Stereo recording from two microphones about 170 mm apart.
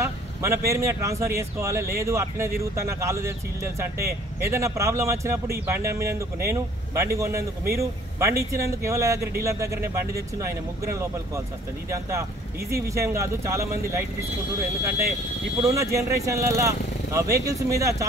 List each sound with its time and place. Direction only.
0.0 s speech: 15° right (ahead or behind)